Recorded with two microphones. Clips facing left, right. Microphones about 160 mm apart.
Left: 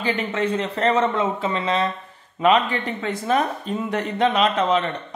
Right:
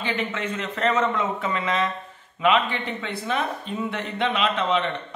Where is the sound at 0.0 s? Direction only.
35° left (ahead or behind).